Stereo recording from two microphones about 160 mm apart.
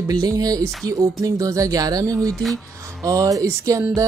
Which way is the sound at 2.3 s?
Centre (ahead or behind).